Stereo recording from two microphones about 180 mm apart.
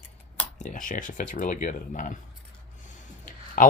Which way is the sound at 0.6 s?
45° left (ahead or behind).